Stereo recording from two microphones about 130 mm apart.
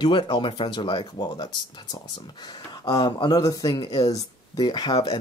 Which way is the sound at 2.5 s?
30° left (ahead or behind).